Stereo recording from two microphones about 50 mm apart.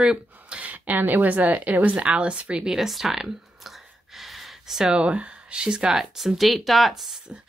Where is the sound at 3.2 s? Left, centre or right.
Centre.